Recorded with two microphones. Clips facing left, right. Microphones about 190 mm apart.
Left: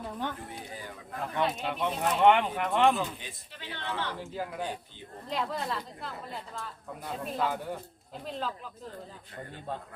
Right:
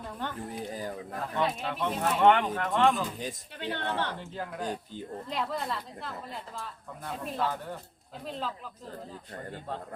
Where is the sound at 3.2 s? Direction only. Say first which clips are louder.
Right 9 dB; 50° right (ahead or behind).